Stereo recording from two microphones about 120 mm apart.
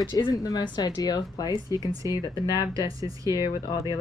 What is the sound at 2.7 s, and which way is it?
Speech, 30° right (ahead or behind).